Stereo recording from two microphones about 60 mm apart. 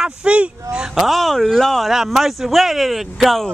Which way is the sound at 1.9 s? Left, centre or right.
Centre.